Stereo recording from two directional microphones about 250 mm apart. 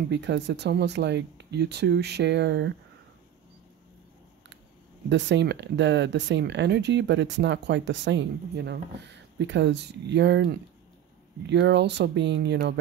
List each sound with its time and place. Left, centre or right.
0.1 s speech: right
5.1 s speech: right